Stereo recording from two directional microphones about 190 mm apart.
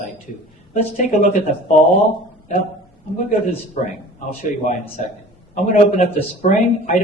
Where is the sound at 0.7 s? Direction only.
40° left (ahead or behind).